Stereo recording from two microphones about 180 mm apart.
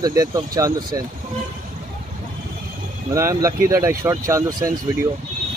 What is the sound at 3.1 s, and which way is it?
Speech, 15° right (ahead or behind).